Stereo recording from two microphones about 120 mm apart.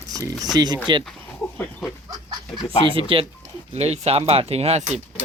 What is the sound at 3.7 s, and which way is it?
Speech, 65° right (ahead or behind).